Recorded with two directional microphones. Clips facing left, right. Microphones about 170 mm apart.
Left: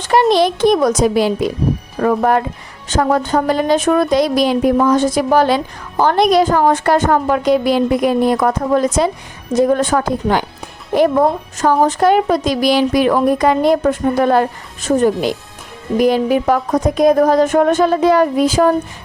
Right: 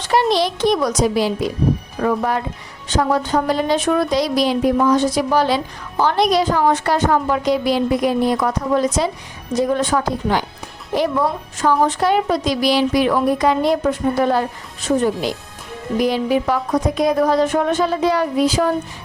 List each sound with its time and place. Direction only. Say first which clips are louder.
0.0 s a woman's voice: left 4 dB; 50° left (ahead or behind)